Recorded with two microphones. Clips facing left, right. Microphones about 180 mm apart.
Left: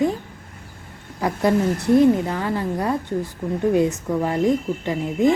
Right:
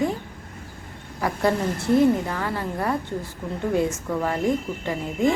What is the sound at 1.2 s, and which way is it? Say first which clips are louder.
A woman's voice: left 3 dB; 20° left (ahead or behind).